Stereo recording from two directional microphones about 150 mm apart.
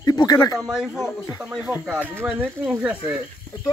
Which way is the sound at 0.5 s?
5° right (ahead or behind).